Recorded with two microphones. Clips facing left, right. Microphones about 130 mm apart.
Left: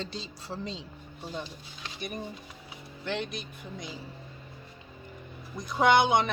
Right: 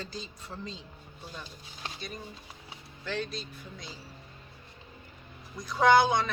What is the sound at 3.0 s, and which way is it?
Speech, 20° left (ahead or behind).